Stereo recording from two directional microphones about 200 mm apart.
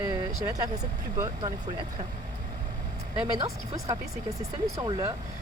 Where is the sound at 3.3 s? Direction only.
20° right (ahead or behind).